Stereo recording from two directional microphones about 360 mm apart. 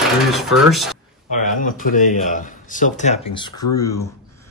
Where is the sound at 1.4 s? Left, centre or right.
Left.